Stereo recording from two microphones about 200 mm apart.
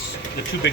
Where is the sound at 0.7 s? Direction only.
65° left (ahead or behind).